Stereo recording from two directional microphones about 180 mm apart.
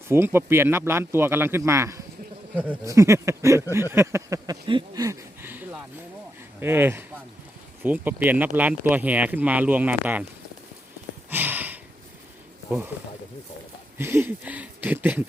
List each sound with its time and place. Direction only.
0.1 s speech: 15° right (ahead or behind)
11.3 s a sound: 10° right (ahead or behind)
12.7 s speech: 10° right (ahead or behind)
14.0 s speech: 10° right (ahead or behind)